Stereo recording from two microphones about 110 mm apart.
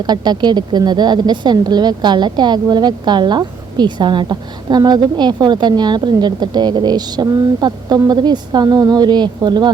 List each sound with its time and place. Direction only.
0.0 s speech: 40° right (ahead or behind)